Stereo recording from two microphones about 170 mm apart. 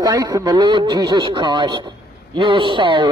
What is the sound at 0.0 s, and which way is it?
A man's voice, 20° right (ahead or behind).